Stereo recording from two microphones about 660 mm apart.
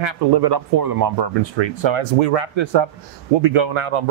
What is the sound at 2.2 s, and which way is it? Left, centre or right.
Speech, right.